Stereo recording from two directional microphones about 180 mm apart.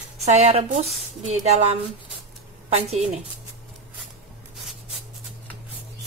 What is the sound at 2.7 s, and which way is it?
Speech, 35° right (ahead or behind).